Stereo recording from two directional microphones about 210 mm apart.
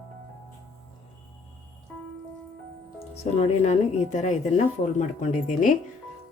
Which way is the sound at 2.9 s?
30° left (ahead or behind).